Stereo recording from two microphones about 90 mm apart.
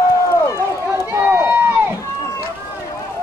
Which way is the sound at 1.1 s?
25° right (ahead or behind).